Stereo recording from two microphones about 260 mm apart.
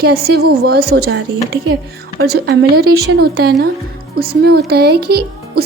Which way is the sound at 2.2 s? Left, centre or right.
Right.